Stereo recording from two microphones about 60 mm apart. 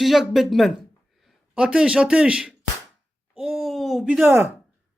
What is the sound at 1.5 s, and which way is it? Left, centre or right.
Speech, centre.